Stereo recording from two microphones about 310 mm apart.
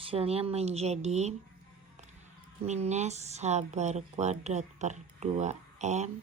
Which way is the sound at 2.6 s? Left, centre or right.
Right.